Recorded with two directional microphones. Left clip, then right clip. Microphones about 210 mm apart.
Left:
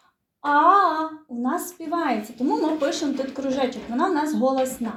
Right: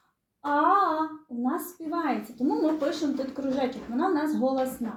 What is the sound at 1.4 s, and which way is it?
A woman's voice, centre (ahead or behind).